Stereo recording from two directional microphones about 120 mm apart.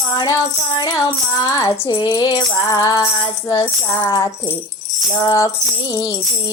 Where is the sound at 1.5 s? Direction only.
30° left (ahead or behind).